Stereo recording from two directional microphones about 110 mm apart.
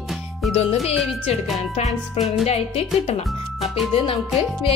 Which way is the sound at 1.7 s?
70° left (ahead or behind).